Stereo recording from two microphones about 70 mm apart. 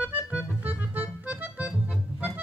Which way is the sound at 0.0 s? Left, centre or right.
Centre.